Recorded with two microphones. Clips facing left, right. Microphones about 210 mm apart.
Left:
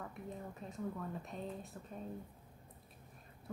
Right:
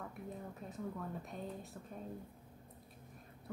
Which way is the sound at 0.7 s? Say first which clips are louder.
Left 1 dB; centre (ahead or behind).